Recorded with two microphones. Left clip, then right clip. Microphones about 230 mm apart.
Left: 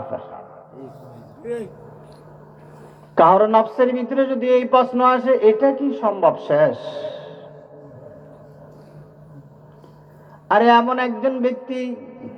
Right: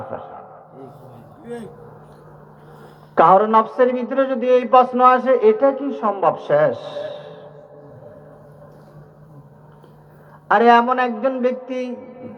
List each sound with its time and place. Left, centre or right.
3.2 s a man's voice: right
10.5 s a man's voice: right